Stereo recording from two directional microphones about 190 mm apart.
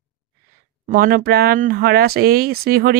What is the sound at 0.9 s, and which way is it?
A woman's voice, 50° right (ahead or behind).